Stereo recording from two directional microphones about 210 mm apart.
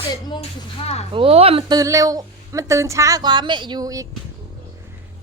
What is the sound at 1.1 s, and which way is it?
A woman's voice, 25° right (ahead or behind).